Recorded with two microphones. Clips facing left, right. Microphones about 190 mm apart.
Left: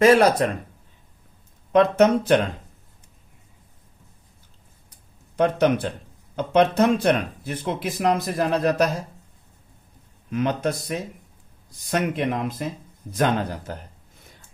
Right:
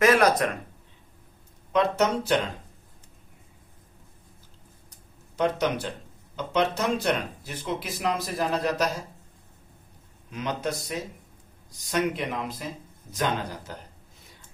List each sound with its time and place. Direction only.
0.0 s speech: 30° left (ahead or behind)
1.7 s speech: 55° left (ahead or behind)
5.4 s speech: 55° left (ahead or behind)
10.3 s speech: 55° left (ahead or behind)